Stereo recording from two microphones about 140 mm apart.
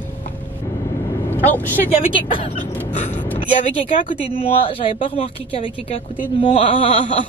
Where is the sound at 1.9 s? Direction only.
40° left (ahead or behind).